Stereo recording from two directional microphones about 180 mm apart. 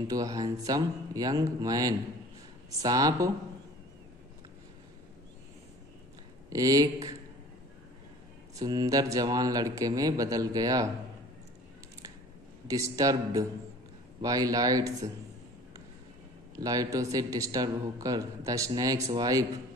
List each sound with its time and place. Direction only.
0.1 s a man's voice: 20° right (ahead or behind)
6.5 s a man's voice: 20° right (ahead or behind)
8.5 s a man's voice: 20° right (ahead or behind)
12.6 s a man's voice: 20° right (ahead or behind)
16.5 s a man's voice: 20° right (ahead or behind)